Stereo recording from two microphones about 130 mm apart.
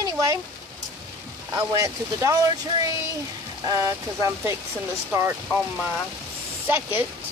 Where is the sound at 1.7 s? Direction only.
25° right (ahead or behind).